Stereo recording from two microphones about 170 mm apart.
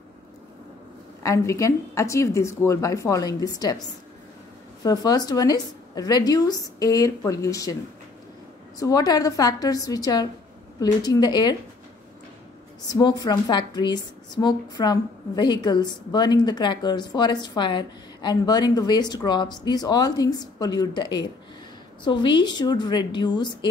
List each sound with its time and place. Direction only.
1.2 s speech: 15° left (ahead or behind)
4.8 s a woman's voice: 20° left (ahead or behind)
8.7 s a woman's voice: 20° left (ahead or behind)
12.8 s a woman's voice: 25° left (ahead or behind)